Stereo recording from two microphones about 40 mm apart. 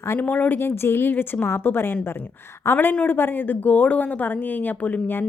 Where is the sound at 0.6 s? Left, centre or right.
Left.